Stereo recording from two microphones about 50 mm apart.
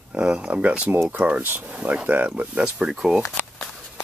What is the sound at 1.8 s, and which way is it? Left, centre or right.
Speech, right.